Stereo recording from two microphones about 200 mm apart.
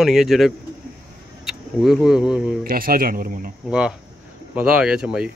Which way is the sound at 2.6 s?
45° right (ahead or behind).